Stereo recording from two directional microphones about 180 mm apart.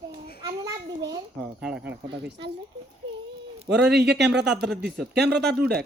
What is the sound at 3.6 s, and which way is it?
A man's voice, 70° right (ahead or behind).